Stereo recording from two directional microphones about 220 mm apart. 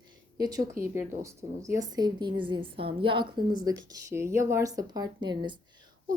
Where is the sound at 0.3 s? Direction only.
15° right (ahead or behind).